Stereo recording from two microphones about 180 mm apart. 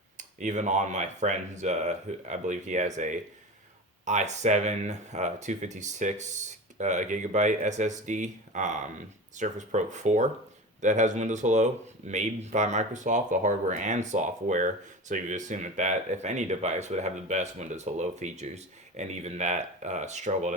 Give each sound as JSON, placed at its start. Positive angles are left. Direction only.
{"t": 0.2, "sound": "speech", "side_deg": -45}